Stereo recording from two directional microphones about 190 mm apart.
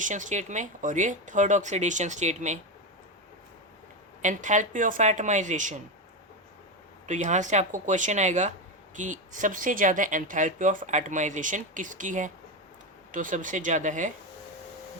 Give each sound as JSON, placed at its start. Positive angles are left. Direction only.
{"t": 0.0, "sound": "speech", "side_deg": -40}
{"t": 4.2, "sound": "speech", "side_deg": -40}
{"t": 7.1, "sound": "speech", "side_deg": -40}